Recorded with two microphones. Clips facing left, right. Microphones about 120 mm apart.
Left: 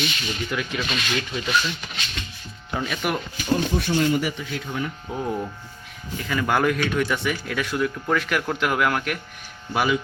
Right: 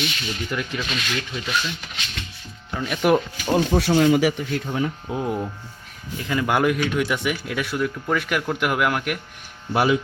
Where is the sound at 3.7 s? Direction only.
90° right.